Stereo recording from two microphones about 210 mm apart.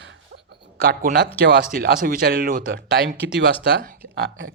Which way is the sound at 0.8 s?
45° right (ahead or behind).